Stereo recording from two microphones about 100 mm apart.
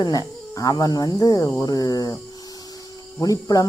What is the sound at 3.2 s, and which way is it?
Speech, 40° left (ahead or behind).